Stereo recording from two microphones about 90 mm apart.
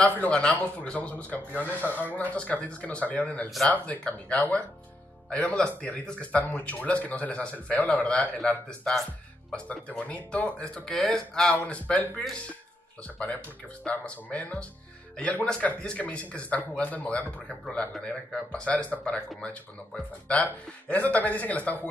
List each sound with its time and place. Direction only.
0.0 s speech: 10° left (ahead or behind)